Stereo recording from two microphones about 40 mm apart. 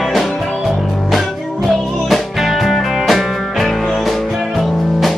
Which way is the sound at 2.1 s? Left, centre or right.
Centre.